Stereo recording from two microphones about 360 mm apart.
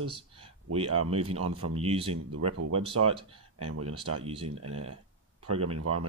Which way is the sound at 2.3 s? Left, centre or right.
Right.